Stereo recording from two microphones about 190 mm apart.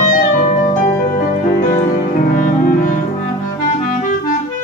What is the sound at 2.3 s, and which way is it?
Music, 45° left (ahead or behind).